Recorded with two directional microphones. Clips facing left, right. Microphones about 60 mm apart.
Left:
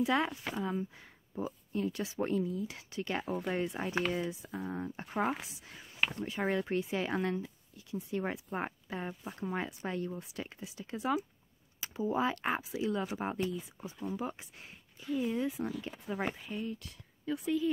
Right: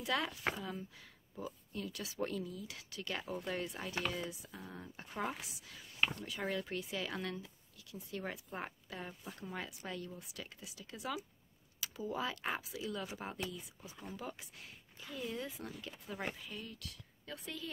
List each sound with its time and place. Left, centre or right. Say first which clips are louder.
0.0 s speech: left 6 dB; left
5.4 s speech: left 3 dB; left
17.3 s speech: left 14 dB; centre